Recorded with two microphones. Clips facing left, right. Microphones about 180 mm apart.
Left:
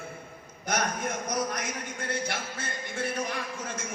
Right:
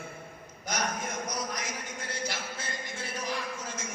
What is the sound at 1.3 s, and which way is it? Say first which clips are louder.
A man's voice: left 5 dB; 55° left (ahead or behind).